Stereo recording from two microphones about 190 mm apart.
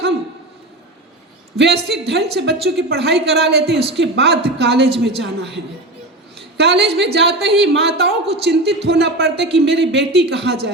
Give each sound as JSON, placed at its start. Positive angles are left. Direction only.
{"t": 1.5, "sound": "a woman's voice", "side_deg": -60}
{"t": 6.6, "sound": "a woman's voice", "side_deg": -60}